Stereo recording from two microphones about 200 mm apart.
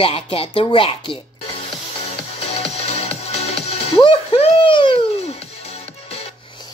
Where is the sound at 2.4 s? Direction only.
30° left (ahead or behind).